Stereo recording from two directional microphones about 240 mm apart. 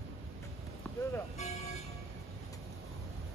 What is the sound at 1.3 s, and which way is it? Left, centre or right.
Speech, left.